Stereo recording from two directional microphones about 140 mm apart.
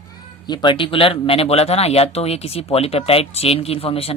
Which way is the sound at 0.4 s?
30° left (ahead or behind).